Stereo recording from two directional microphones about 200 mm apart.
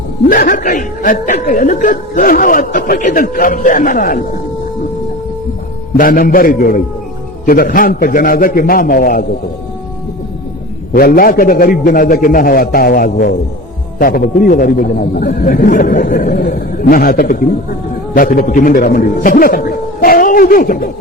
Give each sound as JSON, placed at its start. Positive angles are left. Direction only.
{"t": 0.3, "sound": "speech", "side_deg": 45}
{"t": 6.0, "sound": "speech", "side_deg": 45}
{"t": 10.9, "sound": "speech", "side_deg": 45}